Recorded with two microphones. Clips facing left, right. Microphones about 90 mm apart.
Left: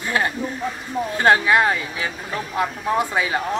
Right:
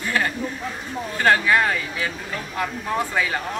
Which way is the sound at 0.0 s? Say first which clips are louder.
Left 1 dB; 25° left (ahead or behind).